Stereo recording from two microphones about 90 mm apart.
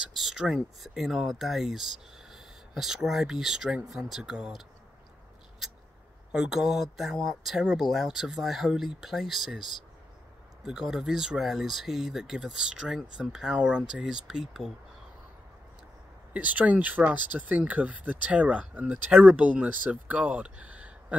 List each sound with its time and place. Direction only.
0.0 s speech: centre (ahead or behind)
6.3 s speech: 5° right (ahead or behind)
16.3 s speech: 15° right (ahead or behind)